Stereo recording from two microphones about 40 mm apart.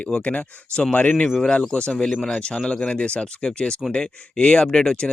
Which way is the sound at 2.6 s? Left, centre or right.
Left.